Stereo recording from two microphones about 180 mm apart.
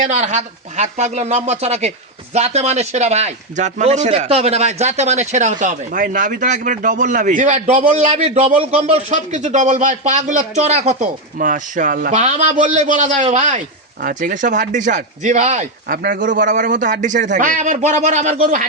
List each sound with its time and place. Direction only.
0.0 s speech: 40° right (ahead or behind)
12.2 s speech: 40° right (ahead or behind)